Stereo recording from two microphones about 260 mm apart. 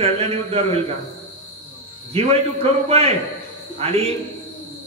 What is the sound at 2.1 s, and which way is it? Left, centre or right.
A man's voice, right.